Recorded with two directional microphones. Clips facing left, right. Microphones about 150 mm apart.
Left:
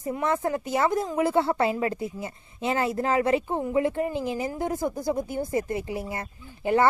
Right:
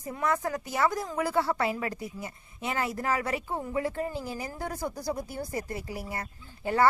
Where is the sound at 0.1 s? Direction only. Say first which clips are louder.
Left 4 dB; 25° left (ahead or behind).